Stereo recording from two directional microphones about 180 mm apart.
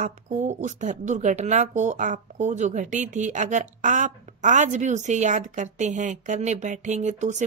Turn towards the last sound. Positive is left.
turn(degrees=-40)  # may be behind; listen again after turning